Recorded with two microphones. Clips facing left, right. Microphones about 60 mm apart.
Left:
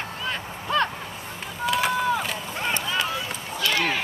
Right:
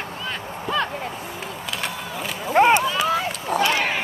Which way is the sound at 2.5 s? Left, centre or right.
Right.